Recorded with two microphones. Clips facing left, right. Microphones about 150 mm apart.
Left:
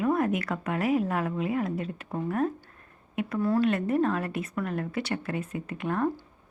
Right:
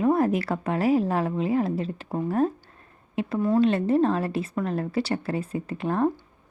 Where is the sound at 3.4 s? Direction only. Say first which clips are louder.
Right 4 dB; 20° right (ahead or behind).